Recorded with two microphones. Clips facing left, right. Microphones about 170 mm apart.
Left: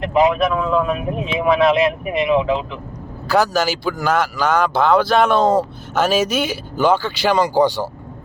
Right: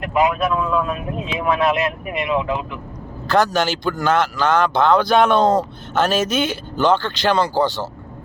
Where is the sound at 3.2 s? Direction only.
5° left (ahead or behind).